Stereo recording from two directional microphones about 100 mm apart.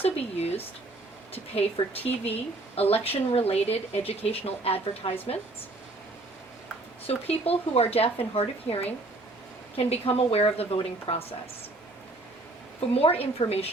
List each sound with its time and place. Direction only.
0.0 s speech: 85° left
7.1 s a woman's voice: 90° left
12.9 s speech: 80° left